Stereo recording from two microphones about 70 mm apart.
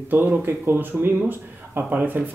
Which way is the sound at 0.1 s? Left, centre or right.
Right.